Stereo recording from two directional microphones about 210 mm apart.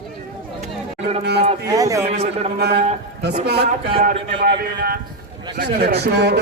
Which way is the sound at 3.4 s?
55° right (ahead or behind).